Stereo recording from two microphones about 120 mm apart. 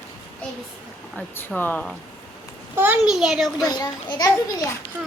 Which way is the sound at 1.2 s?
15° left (ahead or behind).